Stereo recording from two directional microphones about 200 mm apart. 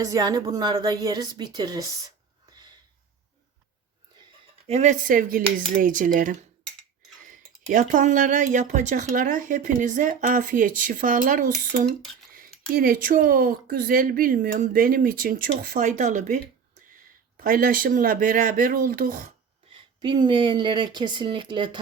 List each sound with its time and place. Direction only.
0.0 s speech: 20° right (ahead or behind)
4.7 s speech: 40° right (ahead or behind)
19.7 s speech: 20° right (ahead or behind)